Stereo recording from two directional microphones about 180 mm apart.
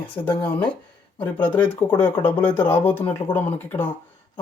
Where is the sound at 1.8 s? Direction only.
10° left (ahead or behind).